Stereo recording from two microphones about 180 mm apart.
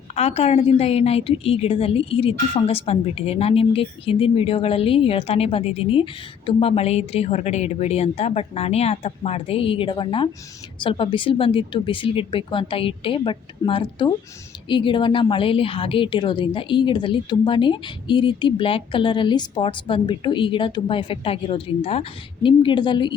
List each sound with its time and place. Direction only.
0.2 s a woman's voice: 35° left (ahead or behind)